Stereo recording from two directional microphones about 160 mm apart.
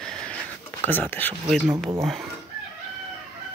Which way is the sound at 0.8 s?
10° left (ahead or behind).